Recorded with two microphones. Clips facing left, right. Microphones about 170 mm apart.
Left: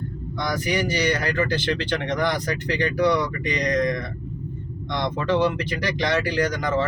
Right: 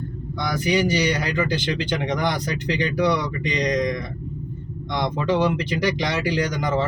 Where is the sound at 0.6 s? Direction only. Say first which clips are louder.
Right 4 dB; 20° right (ahead or behind).